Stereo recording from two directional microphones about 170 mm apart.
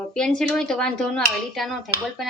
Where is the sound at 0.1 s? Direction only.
5° left (ahead or behind).